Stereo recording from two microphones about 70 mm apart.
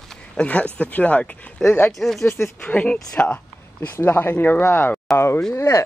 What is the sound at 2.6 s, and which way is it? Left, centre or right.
Speech, centre.